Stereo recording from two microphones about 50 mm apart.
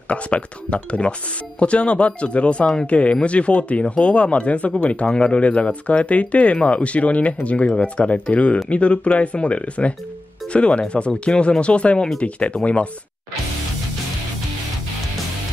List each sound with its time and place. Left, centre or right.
0.1 s speech: left